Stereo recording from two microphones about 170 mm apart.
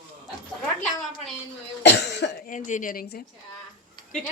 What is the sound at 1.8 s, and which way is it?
Cough, 90° left.